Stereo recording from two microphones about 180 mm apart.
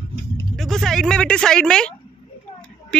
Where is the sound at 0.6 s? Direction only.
Centre (ahead or behind).